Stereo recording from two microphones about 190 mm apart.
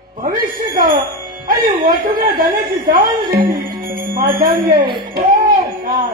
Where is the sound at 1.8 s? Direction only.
50° right (ahead or behind).